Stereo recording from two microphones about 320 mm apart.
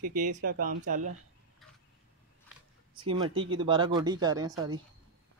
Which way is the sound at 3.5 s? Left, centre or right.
Centre.